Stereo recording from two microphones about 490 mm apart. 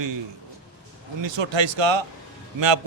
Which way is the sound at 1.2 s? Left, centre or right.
Right.